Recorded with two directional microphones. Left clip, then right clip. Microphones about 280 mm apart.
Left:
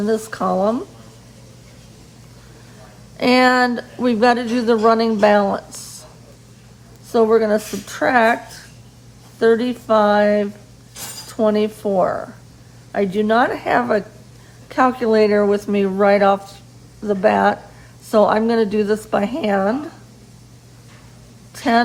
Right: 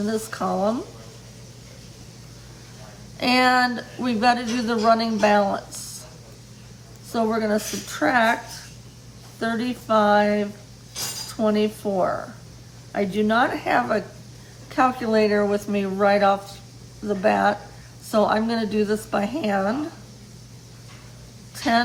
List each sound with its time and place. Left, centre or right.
0.0 s speech: left
3.2 s speech: left
7.1 s speech: left
21.5 s a sound: left